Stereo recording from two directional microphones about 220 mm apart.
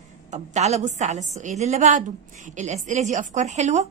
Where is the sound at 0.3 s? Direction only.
30° right (ahead or behind).